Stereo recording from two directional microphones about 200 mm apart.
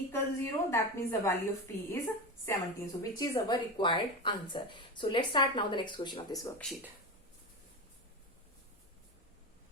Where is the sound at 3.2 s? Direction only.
20° left (ahead or behind).